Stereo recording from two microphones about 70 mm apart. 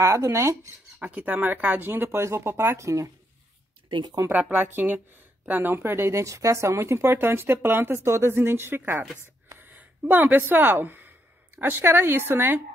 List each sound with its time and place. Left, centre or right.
0.0 s speech: right
1.0 s speech: right
2.0 s speech: right
2.8 s speech: right
4.3 s speech: right